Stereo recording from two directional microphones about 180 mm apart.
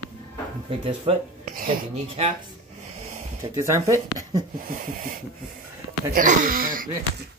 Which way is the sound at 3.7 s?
15° right (ahead or behind).